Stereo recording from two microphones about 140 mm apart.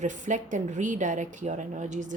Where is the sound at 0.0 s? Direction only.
60° right (ahead or behind).